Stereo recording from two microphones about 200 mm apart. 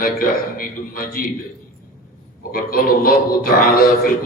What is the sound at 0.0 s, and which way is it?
A man's voice, 45° left (ahead or behind).